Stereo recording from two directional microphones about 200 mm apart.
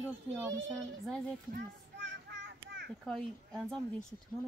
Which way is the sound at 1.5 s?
60° right (ahead or behind).